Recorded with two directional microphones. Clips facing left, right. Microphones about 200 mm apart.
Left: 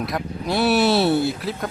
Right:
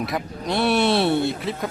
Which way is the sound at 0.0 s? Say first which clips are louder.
Left 1 dB; centre (ahead or behind).